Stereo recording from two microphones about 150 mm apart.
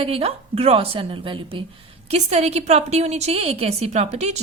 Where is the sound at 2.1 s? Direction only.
45° right (ahead or behind).